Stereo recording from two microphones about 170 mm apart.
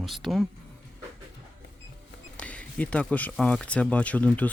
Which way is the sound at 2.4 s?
5° left (ahead or behind).